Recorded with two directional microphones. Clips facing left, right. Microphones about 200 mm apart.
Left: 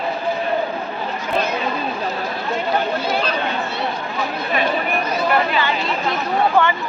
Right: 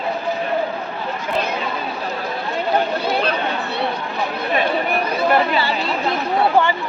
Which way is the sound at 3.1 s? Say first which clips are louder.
Right 1 dB; 60° right (ahead or behind).